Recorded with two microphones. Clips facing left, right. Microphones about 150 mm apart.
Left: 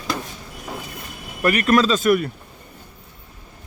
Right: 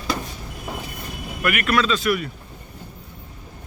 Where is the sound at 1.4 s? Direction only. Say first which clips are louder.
Left 4 dB; 35° left (ahead or behind).